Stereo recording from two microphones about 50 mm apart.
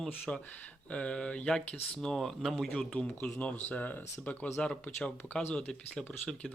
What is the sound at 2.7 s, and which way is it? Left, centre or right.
Speech, left.